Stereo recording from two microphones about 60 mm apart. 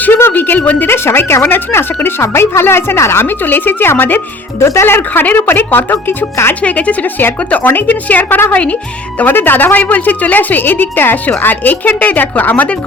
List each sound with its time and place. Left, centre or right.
0.0 s a woman's voice: left
0.9 s a woman's voice: left
4.6 s speech: left
5.2 s a woman's voice: left
6.5 s a woman's voice: left